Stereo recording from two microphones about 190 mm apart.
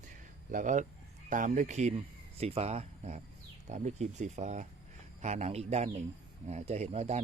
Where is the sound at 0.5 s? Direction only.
40° right (ahead or behind).